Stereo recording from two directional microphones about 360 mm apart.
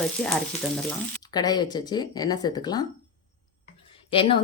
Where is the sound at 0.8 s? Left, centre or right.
Centre.